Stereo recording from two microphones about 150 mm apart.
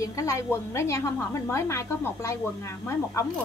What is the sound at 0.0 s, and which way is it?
A woman's voice, 20° left (ahead or behind).